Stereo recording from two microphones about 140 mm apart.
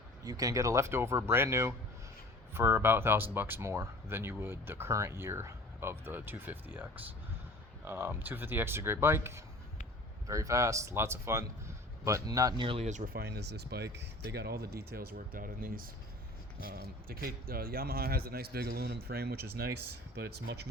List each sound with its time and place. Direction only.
0.3 s speech: 25° right (ahead or behind)
12.6 s speech: 45° right (ahead or behind)
12.9 s speech: 60° right (ahead or behind)
14.3 s speech: 90° right